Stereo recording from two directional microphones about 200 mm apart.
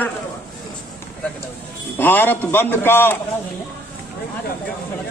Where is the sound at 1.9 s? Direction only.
10° left (ahead or behind).